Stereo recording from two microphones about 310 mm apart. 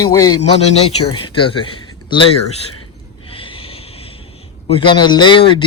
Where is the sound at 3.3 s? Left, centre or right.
Centre.